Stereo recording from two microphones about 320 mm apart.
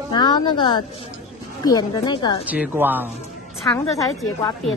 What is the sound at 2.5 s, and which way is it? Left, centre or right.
Speech, centre.